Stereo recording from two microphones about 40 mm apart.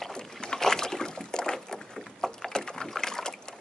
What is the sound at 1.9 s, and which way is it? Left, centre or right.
Rowboat, centre.